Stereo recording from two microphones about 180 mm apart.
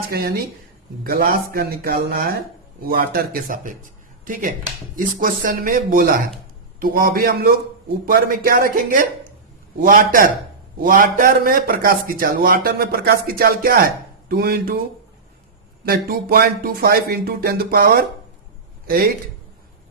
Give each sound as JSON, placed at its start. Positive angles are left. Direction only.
{"t": 0.1, "sound": "a man's voice", "side_deg": -55}
{"t": 15.9, "sound": "speech", "side_deg": -55}